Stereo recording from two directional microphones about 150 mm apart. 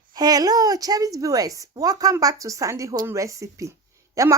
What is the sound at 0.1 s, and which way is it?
A woman's voice, 25° right (ahead or behind).